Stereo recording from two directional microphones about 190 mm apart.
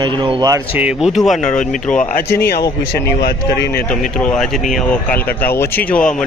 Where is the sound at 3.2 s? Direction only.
55° left (ahead or behind).